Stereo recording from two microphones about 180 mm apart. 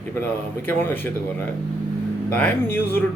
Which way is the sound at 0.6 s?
10° left (ahead or behind).